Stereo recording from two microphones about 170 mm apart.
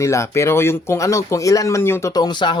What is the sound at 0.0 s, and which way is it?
Speech, 15° left (ahead or behind).